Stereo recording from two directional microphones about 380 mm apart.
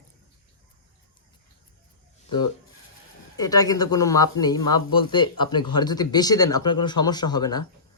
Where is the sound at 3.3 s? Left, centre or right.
Centre.